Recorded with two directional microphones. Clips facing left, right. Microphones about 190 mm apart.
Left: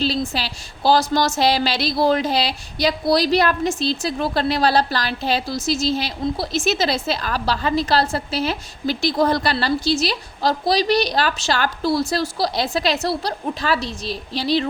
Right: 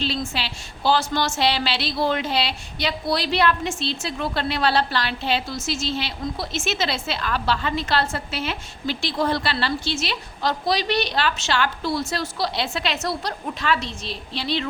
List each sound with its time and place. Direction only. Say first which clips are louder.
0.3 s a woman's voice: left 3 dB; 40° left (ahead or behind)